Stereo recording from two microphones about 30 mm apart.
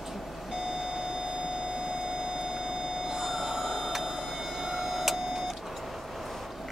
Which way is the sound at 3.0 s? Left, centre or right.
Centre.